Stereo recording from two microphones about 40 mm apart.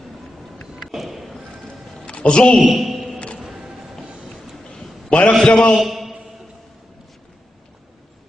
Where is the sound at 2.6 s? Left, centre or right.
Centre.